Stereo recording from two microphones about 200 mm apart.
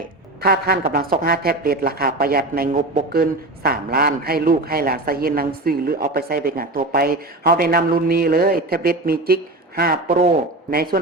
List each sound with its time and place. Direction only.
0.4 s speech: 50° right (ahead or behind)